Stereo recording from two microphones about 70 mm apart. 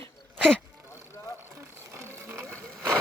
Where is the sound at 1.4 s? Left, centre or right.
Right.